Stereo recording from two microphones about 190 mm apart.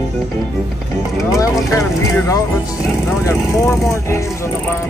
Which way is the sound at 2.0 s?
15° left (ahead or behind).